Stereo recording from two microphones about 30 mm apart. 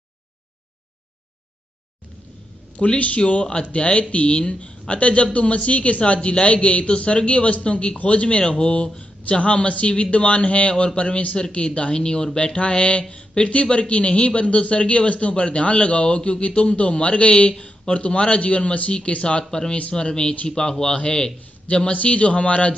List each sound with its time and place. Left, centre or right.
2.8 s speech: left
3.3 s a man's voice: left
9.4 s a man's voice: left
12.5 s speech: left
13.5 s a man's voice: left